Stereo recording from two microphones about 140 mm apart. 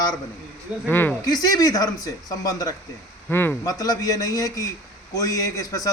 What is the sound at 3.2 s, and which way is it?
A man's voice, 15° left (ahead or behind).